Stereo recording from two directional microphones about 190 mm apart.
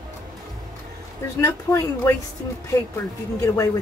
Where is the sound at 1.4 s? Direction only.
10° left (ahead or behind).